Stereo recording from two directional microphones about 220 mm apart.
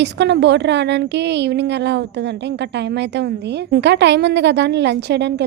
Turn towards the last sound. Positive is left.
turn(degrees=-50)  # may be behind; listen again after turning